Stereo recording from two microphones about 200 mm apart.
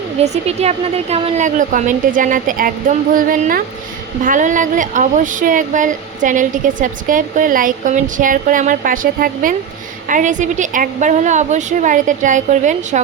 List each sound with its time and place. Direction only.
0.4 s speech: 30° right (ahead or behind)